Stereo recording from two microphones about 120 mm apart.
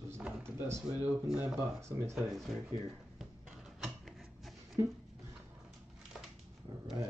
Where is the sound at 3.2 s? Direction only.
Centre (ahead or behind).